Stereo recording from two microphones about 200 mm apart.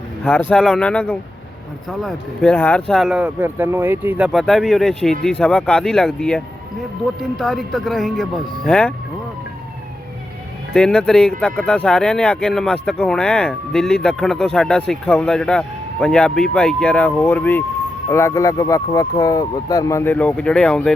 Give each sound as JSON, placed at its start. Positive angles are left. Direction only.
{"t": 0.3, "sound": "speech", "side_deg": 5}
{"t": 10.8, "sound": "speech", "side_deg": 5}